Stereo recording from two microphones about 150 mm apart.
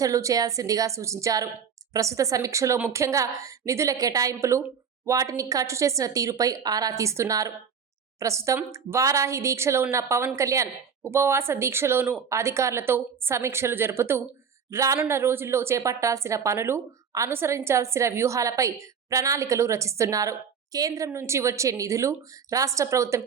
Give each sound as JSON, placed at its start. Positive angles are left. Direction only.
{"t": 0.0, "sound": "a woman's voice", "side_deg": -20}